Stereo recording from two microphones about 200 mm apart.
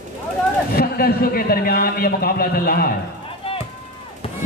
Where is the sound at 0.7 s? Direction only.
50° left (ahead or behind).